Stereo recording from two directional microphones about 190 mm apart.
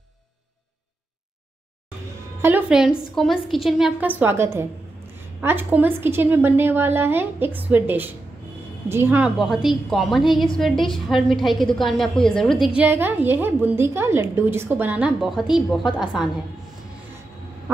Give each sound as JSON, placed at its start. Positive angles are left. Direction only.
{"t": 2.4, "sound": "a woman's voice", "side_deg": -5}
{"t": 17.7, "sound": "quack", "side_deg": -15}